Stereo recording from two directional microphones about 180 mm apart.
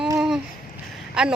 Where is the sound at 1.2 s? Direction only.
5° right (ahead or behind).